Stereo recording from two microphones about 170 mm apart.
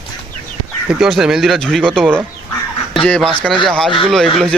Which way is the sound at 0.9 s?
5° right (ahead or behind).